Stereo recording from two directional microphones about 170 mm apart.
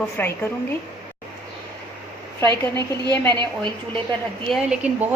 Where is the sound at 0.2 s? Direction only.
10° left (ahead or behind).